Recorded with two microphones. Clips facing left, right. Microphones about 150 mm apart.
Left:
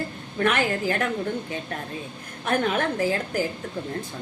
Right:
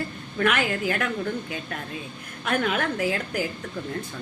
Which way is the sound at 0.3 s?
35° left (ahead or behind).